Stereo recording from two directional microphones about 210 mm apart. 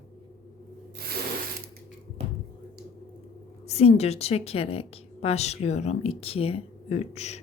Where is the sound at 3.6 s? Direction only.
30° left (ahead or behind).